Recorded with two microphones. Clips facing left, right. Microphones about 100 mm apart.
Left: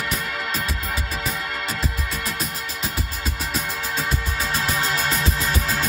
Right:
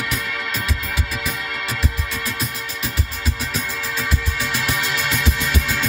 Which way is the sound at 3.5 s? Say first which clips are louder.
Even; 35° left (ahead or behind).